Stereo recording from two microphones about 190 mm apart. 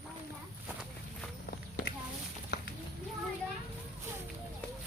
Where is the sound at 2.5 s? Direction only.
60° left (ahead or behind).